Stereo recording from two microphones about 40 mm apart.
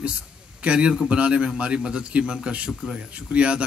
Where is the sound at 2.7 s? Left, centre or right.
Centre.